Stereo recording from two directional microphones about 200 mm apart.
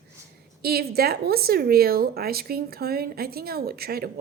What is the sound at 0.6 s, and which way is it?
A woman's voice, 50° right (ahead or behind).